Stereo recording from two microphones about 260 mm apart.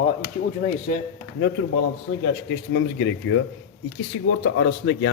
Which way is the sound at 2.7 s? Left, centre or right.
Left.